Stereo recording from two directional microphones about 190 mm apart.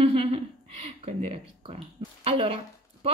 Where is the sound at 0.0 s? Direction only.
30° right (ahead or behind).